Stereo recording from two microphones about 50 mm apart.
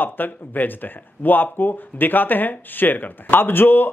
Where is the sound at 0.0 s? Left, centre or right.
Left.